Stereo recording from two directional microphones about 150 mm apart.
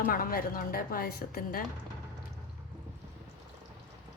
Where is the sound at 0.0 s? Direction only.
75° left (ahead or behind).